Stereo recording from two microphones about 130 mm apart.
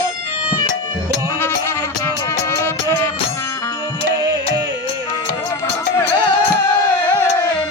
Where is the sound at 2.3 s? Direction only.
20° left (ahead or behind).